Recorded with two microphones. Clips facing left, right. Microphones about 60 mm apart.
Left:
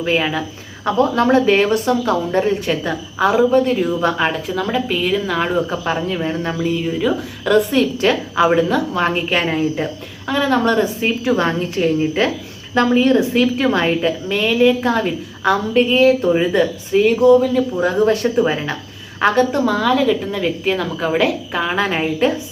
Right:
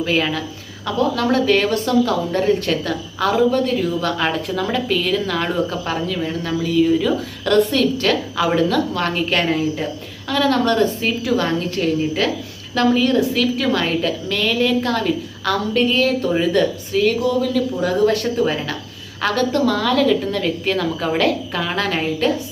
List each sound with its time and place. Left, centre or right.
0.0 s a woman's voice: centre
0.9 s speech: left
4.3 s a woman's voice: centre
4.9 s a woman's voice: centre
6.8 s a woman's voice: centre